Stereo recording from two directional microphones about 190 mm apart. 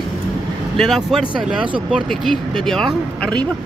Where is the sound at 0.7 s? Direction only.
Centre (ahead or behind).